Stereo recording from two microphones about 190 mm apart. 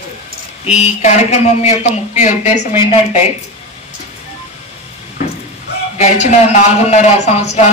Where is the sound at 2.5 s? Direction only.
15° right (ahead or behind).